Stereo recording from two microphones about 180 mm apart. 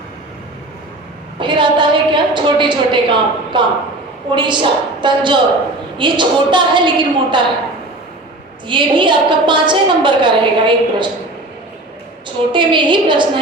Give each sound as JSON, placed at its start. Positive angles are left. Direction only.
{"t": 1.4, "sound": "a sound", "side_deg": -25}
{"t": 4.3, "sound": "a woman's voice", "side_deg": -25}
{"t": 8.6, "sound": "a woman's voice", "side_deg": -25}
{"t": 12.5, "sound": "a woman's voice", "side_deg": -25}